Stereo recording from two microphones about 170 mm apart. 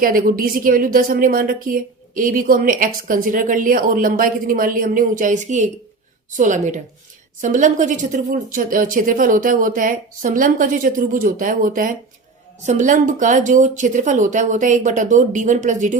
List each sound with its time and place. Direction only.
0.0 s a woman's voice: 55° right (ahead or behind)